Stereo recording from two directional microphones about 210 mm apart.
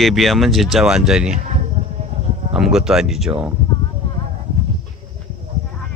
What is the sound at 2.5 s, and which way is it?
Speech, centre (ahead or behind).